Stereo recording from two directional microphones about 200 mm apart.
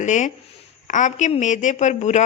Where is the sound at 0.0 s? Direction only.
40° left (ahead or behind).